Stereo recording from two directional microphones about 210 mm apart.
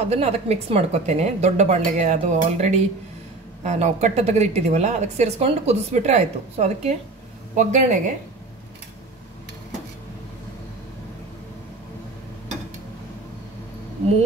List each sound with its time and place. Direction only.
0.0 s speech: 30° right (ahead or behind)